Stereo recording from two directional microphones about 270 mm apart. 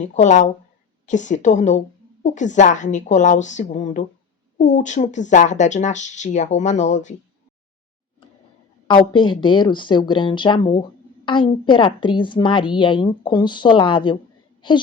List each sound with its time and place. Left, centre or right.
0.0 s speech: left
8.9 s a woman's voice: centre